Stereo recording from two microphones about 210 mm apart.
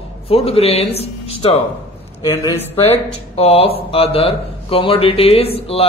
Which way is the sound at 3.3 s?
30° left (ahead or behind).